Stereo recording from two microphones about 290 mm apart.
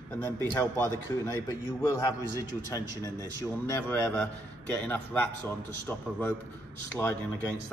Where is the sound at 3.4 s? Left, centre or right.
Centre.